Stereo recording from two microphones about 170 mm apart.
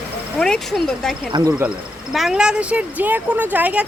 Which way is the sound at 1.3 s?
20° right (ahead or behind).